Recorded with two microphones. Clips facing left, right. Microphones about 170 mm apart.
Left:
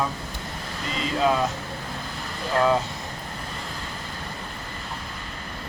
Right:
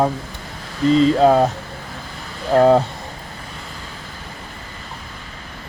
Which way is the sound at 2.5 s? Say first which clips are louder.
Right 9 dB; 50° right (ahead or behind).